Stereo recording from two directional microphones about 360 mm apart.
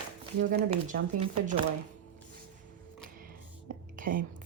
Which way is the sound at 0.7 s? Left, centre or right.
Centre.